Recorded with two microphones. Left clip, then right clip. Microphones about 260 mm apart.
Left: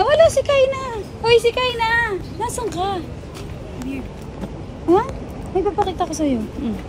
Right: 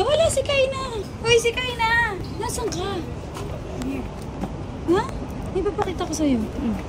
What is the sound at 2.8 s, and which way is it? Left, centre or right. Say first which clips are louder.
Speech: left 6 dB; centre.